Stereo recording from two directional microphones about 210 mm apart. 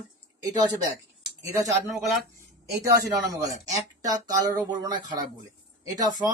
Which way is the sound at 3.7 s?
15° right (ahead or behind).